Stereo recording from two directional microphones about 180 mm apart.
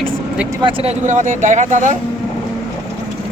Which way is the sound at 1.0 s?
45° right (ahead or behind).